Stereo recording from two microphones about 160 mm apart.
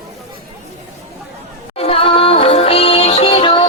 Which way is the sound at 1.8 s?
35° left (ahead or behind).